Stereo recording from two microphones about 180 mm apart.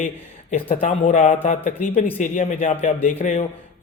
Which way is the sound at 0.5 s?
35° left (ahead or behind).